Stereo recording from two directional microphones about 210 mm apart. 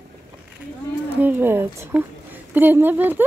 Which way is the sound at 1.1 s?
10° right (ahead or behind).